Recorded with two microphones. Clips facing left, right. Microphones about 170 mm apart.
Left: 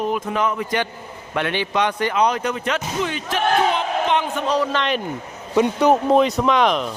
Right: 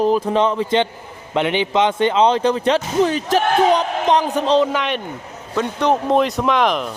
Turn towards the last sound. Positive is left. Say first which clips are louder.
# even
turn(degrees=0)  # may be behind; listen again after turning